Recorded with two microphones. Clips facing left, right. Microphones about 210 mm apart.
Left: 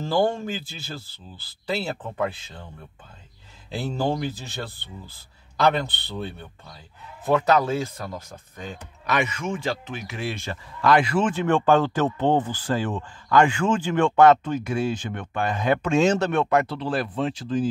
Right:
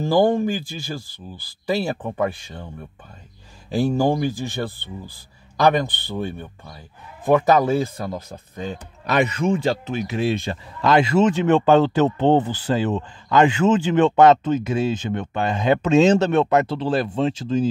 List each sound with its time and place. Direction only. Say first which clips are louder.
0.0 s speech: right 5 dB; 15° right (ahead or behind)
3.7 s speech: right 7 dB; 15° right (ahead or behind)
5.6 s speech: right 4 dB; 15° right (ahead or behind)
9.0 s speech: right 6 dB; 35° right (ahead or behind)
10.4 s speech: right 2 dB; 25° right (ahead or behind)